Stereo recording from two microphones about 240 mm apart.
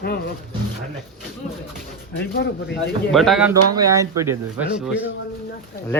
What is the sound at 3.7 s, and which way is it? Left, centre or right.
Speech, centre.